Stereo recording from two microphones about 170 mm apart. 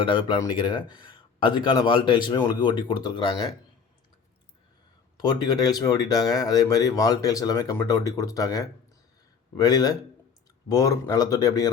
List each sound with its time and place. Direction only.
0.0 s speech: 30° left (ahead or behind)
5.1 s speech: 25° left (ahead or behind)